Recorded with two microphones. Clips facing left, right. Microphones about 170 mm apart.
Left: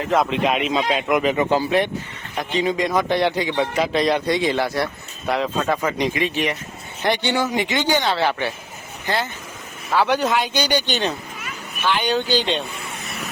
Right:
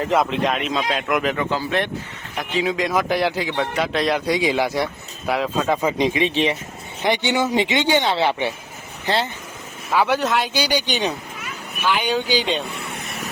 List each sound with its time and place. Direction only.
0.1 s a man's voice: centre (ahead or behind)
1.4 s speech: 20° left (ahead or behind)
2.4 s a man's voice: centre (ahead or behind); by 8.5 s 20° right (ahead or behind)
9.9 s speech: 5° right (ahead or behind)